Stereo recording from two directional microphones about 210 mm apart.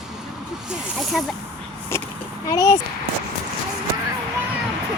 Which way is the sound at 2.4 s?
15° left (ahead or behind).